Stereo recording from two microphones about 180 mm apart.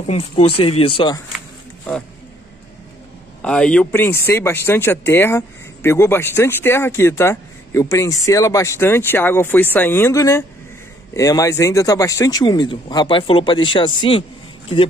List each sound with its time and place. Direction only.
0.0 s speech: 35° left (ahead or behind)
3.4 s speech: 5° left (ahead or behind); by 14.2 s 25° left (ahead or behind)